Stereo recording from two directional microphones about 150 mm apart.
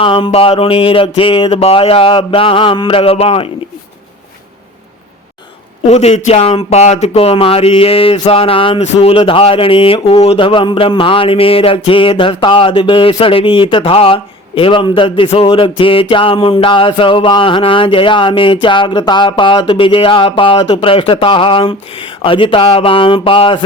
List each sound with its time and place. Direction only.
0.0 s speech: 35° left (ahead or behind)
5.9 s speech: 45° left (ahead or behind)